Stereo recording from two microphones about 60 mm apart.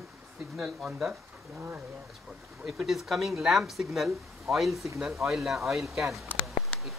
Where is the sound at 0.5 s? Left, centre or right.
Centre.